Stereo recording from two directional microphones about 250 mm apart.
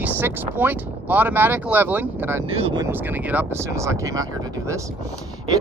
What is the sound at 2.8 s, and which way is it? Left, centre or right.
Speech, centre.